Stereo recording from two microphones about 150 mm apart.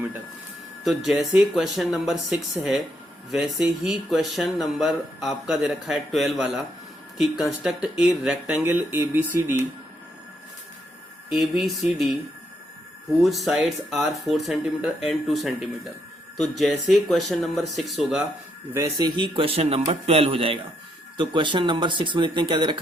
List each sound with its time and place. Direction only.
0.9 s speech: centre (ahead or behind)
11.3 s speech: centre (ahead or behind)
13.1 s speech: centre (ahead or behind)
18.9 s a man's voice: 30° right (ahead or behind)